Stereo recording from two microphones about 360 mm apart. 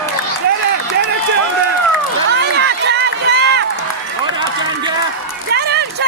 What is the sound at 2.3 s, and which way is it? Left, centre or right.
Run, right.